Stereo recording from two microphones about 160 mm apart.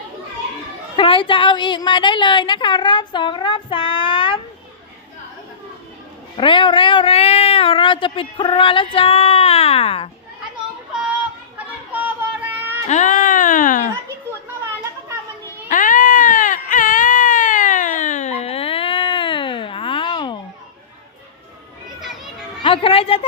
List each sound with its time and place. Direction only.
0.9 s a woman's voice: 35° left (ahead or behind)
6.3 s speech: 30° left (ahead or behind)
11.5 s a sound: 10° right (ahead or behind)
12.9 s speech: 50° left (ahead or behind)
15.7 s baby cry: 55° left (ahead or behind); by 20.4 s 30° left (ahead or behind)
22.6 s a woman's voice: 35° left (ahead or behind)